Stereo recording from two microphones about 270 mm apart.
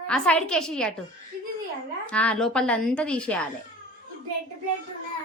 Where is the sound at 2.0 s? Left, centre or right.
Centre.